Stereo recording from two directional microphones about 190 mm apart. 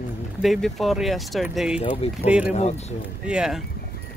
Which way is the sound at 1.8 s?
30° left (ahead or behind).